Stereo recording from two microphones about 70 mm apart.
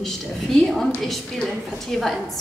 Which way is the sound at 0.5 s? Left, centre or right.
Centre.